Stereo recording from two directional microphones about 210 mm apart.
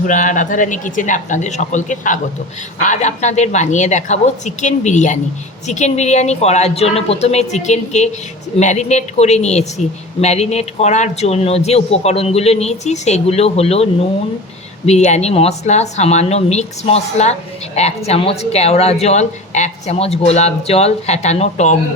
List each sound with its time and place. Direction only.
0.0 s a woman's voice: 40° left (ahead or behind)
14.8 s a woman's voice: 35° left (ahead or behind)